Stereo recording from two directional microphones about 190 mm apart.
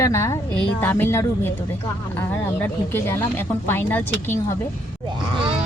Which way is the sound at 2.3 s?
10° left (ahead or behind).